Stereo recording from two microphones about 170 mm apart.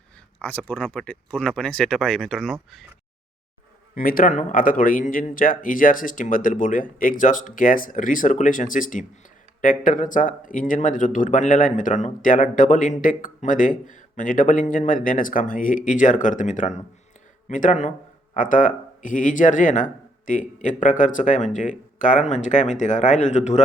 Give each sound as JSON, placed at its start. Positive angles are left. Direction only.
{"t": 0.3, "sound": "speech", "side_deg": 10}
{"t": 3.9, "sound": "speech", "side_deg": 55}